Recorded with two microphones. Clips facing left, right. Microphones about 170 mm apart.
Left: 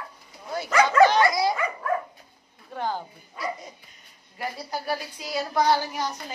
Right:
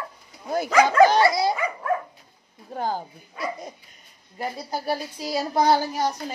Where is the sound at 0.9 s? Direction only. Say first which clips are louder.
Even; 35° right (ahead or behind).